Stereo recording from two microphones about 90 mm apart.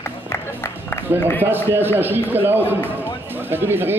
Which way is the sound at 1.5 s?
25° right (ahead or behind).